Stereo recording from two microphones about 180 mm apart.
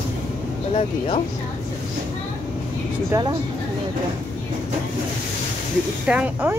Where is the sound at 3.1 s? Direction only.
25° right (ahead or behind).